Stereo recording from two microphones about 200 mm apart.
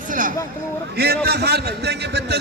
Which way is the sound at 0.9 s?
50° right (ahead or behind).